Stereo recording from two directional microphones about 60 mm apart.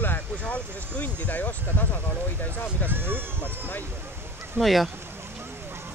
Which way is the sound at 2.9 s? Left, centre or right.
Right.